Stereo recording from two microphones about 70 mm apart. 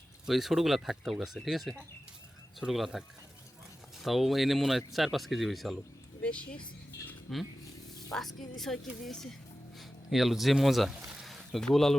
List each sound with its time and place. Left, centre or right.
0.3 s speech: centre
4.0 s speech: centre
6.2 s speech: centre
7.3 s speech: centre